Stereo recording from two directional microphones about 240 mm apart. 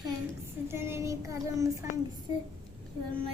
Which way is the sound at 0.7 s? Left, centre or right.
Centre.